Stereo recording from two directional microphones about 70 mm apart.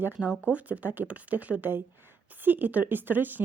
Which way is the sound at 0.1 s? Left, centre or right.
Centre.